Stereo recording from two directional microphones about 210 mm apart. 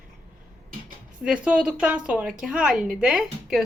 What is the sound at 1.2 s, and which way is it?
Speech, 5° right (ahead or behind).